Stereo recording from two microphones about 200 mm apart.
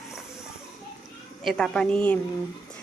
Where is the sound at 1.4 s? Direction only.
Centre (ahead or behind).